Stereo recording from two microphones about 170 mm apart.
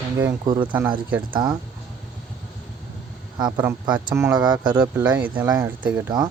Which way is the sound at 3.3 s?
25° right (ahead or behind).